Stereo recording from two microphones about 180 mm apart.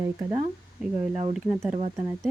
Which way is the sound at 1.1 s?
35° right (ahead or behind).